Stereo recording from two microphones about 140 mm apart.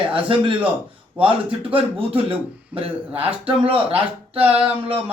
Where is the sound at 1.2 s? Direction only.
40° right (ahead or behind).